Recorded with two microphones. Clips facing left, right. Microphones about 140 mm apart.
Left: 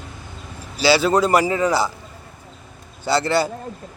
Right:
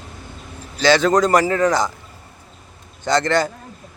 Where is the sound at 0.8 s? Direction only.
10° left (ahead or behind).